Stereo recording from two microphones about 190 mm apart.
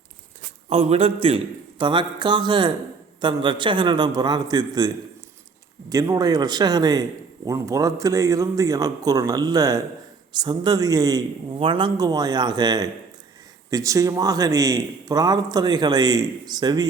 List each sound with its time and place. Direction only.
0.7 s a man's voice: 30° right (ahead or behind)
5.9 s a man's voice: 20° right (ahead or behind)